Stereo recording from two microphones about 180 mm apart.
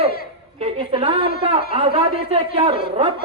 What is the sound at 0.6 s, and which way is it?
A woman's voice, 30° right (ahead or behind).